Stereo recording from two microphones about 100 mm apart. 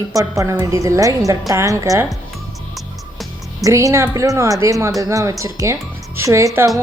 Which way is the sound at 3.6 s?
30° right (ahead or behind).